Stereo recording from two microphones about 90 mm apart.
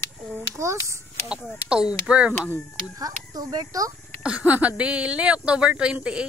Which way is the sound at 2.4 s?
25° left (ahead or behind).